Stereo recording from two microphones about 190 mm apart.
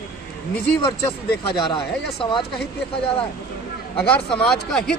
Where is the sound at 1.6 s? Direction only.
25° left (ahead or behind).